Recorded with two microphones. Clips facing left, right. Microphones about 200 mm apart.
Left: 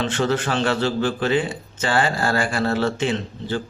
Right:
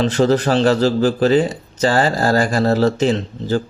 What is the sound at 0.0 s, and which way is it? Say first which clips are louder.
A man's voice: right 7 dB; 35° right (ahead or behind).